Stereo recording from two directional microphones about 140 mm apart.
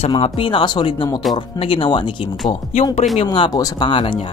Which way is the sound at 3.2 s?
35° left (ahead or behind).